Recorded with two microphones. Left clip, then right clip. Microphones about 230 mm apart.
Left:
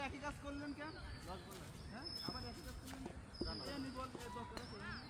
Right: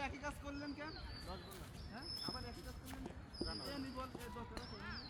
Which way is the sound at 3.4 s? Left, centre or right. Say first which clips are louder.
Right 1 dB; centre.